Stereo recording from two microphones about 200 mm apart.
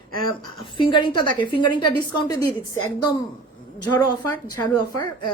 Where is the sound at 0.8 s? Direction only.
25° left (ahead or behind).